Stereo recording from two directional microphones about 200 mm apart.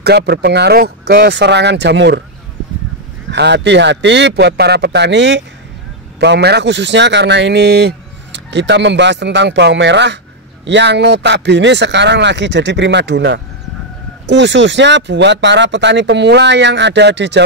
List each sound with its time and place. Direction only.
0.0 s speech: 55° right (ahead or behind)
3.3 s speech: 60° right (ahead or behind)